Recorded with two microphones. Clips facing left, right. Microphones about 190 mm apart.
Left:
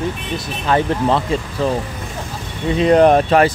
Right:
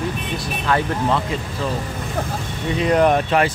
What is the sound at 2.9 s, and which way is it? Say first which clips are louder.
Speech: left 5 dB; 35° left (ahead or behind).